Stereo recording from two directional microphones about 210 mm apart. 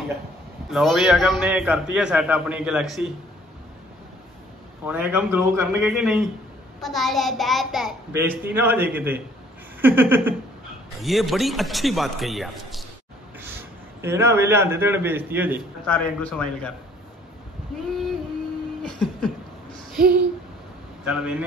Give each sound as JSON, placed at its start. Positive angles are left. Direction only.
{"t": 0.7, "sound": "a man's voice", "side_deg": 0}
{"t": 4.8, "sound": "a man's voice", "side_deg": -5}
{"t": 14.0, "sound": "a man's voice", "side_deg": -10}
{"t": 15.9, "sound": "a man's voice", "side_deg": 5}
{"t": 18.8, "sound": "a sound", "side_deg": 5}
{"t": 21.0, "sound": "speech", "side_deg": -5}